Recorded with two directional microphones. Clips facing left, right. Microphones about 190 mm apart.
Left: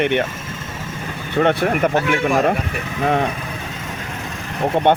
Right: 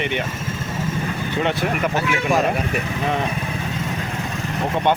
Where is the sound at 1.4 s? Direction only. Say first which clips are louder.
Left 6 dB; 50° left (ahead or behind).